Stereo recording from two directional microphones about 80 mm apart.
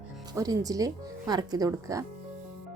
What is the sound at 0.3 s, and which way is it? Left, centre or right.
Speech, right.